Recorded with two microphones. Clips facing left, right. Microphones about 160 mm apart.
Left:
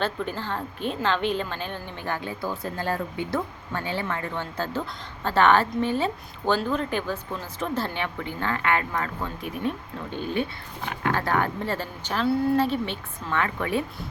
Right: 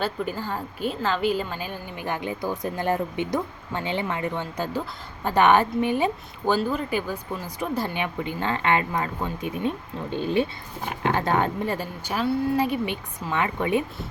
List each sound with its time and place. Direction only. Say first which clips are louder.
0.0 s a woman's voice: right 1 dB; 10° right (ahead or behind)